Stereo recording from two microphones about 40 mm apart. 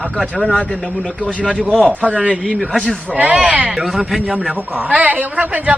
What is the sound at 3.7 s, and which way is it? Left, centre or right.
Speech, centre.